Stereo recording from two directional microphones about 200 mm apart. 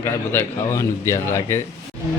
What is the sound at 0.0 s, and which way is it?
Speech, 10° left (ahead or behind).